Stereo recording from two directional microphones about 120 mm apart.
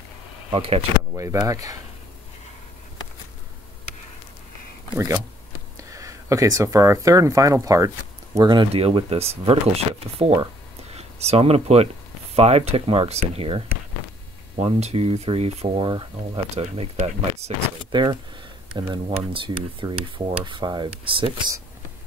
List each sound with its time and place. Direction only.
0.5 s speech: 55° right (ahead or behind)
1.1 s speech: 25° right (ahead or behind)
4.9 s speech: 25° right (ahead or behind)
8.4 s speech: 40° right (ahead or behind)
8.7 s speech: 55° right (ahead or behind)
18.8 s speech: 45° right (ahead or behind)